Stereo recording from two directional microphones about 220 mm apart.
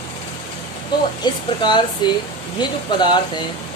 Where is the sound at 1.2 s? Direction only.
20° left (ahead or behind).